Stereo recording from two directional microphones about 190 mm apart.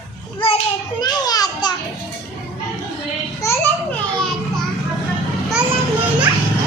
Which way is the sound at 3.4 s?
10° left (ahead or behind).